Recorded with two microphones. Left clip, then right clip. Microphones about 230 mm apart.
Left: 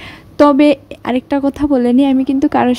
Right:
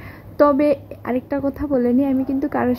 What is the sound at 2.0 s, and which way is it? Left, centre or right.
Speech, left.